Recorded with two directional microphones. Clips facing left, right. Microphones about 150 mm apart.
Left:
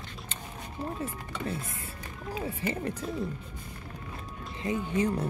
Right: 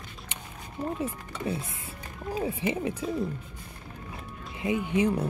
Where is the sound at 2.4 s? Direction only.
15° right (ahead or behind).